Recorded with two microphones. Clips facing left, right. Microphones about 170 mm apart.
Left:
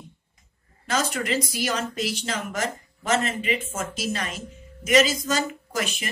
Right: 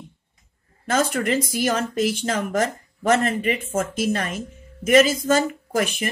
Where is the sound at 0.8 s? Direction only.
50° right (ahead or behind).